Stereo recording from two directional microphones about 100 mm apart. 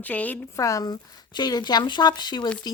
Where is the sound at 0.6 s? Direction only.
35° left (ahead or behind).